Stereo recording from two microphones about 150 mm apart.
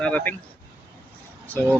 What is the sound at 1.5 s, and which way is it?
Speech, 10° left (ahead or behind).